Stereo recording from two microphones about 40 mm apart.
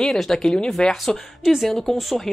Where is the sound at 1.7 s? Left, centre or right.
Centre.